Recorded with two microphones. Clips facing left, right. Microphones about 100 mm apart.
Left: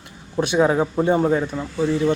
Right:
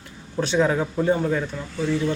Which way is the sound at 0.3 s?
15° left (ahead or behind).